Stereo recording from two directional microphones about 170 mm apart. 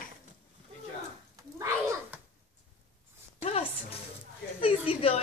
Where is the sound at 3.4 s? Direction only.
40° left (ahead or behind).